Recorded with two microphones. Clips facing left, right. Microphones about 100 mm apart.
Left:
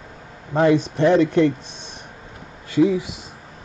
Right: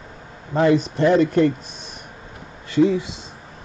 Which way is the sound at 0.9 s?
20° left (ahead or behind).